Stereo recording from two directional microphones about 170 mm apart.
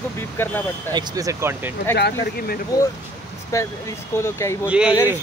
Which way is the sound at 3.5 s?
15° left (ahead or behind).